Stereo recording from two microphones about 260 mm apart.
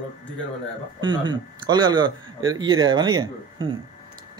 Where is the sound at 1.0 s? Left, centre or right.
Centre.